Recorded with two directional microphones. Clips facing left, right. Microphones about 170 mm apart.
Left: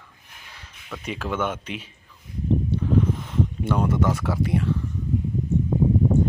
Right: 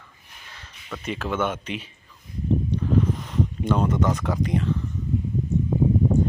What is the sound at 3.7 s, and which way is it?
Speech, 10° left (ahead or behind).